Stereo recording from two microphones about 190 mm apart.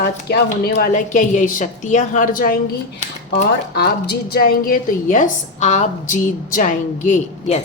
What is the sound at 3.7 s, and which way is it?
A woman's voice, 55° left (ahead or behind).